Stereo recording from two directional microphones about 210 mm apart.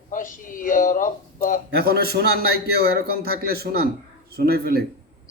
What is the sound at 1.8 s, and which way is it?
A man's voice, 50° right (ahead or behind).